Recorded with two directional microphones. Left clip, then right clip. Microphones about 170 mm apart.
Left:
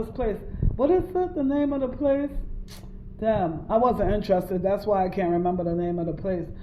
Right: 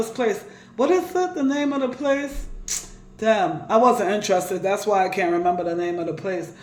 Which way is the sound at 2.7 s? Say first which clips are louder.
Right 19 dB; 15° right (ahead or behind).